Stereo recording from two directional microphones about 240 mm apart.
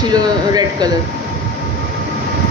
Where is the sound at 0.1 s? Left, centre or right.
Centre.